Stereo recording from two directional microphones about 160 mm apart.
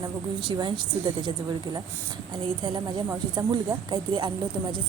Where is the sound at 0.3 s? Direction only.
30° right (ahead or behind).